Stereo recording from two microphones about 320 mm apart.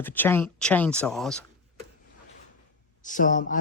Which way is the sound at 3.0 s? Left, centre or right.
Left.